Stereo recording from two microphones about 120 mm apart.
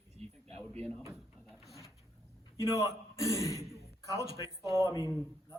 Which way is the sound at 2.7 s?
25° right (ahead or behind).